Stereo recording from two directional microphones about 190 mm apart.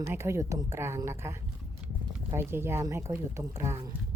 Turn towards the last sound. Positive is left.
turn(degrees=-15)  # may be behind; listen again after turning